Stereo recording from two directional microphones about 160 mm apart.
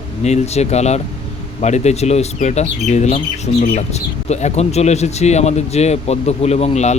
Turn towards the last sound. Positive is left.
turn(degrees=45)  # may be behind; listen again after turning